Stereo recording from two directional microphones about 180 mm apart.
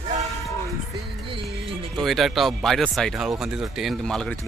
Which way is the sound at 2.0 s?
Centre (ahead or behind).